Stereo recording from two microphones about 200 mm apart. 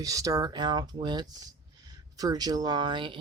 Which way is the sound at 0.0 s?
15° right (ahead or behind).